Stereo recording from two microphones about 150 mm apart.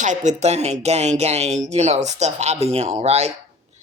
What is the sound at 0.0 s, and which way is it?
Speech, 55° right (ahead or behind).